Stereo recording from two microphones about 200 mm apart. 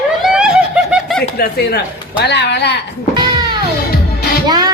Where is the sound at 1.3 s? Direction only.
50° left (ahead or behind).